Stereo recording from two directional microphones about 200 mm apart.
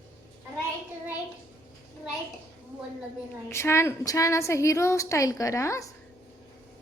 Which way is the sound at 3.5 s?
15° left (ahead or behind).